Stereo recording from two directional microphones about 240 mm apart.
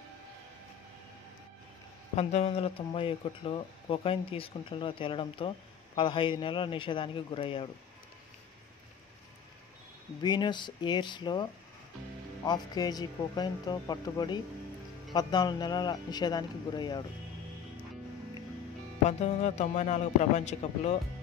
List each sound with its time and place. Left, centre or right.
2.1 s speech: left
10.2 s speech: centre
12.4 s speech: centre
19.0 s speech: left